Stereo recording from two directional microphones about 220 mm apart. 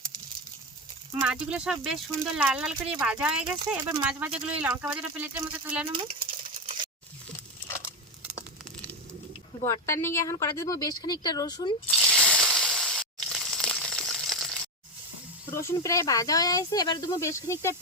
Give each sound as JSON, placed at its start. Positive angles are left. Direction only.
{"t": 1.2, "sound": "speech", "side_deg": -5}
{"t": 5.9, "sound": "speech", "side_deg": -25}
{"t": 9.6, "sound": "speech", "side_deg": 10}
{"t": 12.2, "sound": "a sound", "side_deg": 0}
{"t": 15.4, "sound": "speech", "side_deg": 15}